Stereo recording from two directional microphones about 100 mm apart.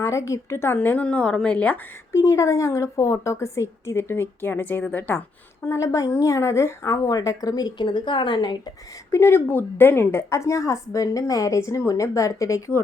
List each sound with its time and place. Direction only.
0.0 s a woman's voice: 30° left (ahead or behind); by 1.8 s 15° left (ahead or behind)
2.1 s a woman's voice: 30° left (ahead or behind)
5.6 s speech: 30° left (ahead or behind); by 8.5 s 50° left (ahead or behind)
9.1 s a woman's voice: 25° left (ahead or behind)